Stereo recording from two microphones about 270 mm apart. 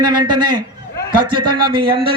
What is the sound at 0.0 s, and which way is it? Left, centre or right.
A man's voice, right.